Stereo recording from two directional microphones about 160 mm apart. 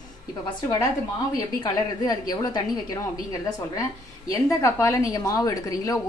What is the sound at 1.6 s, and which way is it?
A woman's voice, 25° left (ahead or behind).